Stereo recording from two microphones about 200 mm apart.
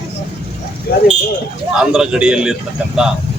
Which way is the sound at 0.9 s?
50° left (ahead or behind).